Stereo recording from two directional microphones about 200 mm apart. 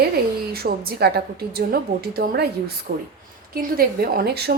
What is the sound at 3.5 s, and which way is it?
Speech, 50° right (ahead or behind).